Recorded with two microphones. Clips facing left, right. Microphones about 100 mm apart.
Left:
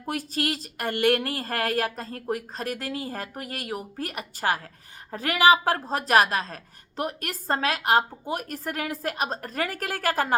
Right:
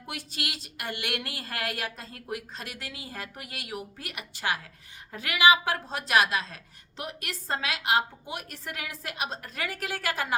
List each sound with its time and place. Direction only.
0.0 s a woman's voice: 40° left (ahead or behind)